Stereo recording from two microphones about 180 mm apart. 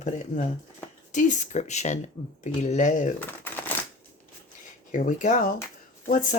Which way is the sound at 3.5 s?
10° left (ahead or behind).